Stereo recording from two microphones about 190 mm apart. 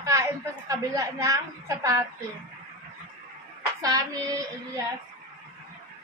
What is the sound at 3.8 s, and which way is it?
Child singing, 20° right (ahead or behind).